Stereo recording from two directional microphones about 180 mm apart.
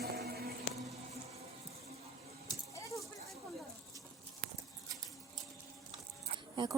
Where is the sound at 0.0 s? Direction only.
60° right (ahead or behind).